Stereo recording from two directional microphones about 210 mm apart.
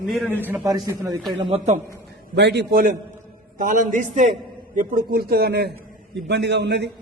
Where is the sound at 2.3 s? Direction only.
55° right (ahead or behind).